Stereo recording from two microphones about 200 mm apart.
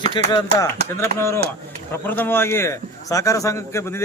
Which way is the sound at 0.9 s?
15° left (ahead or behind).